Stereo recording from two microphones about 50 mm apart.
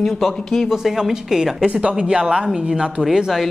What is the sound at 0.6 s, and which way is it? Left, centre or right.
A woman's voice, centre.